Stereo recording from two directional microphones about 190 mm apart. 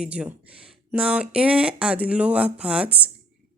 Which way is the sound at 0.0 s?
5° right (ahead or behind).